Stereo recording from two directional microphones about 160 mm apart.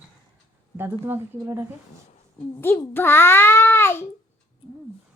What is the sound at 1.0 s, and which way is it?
Speech, 15° right (ahead or behind).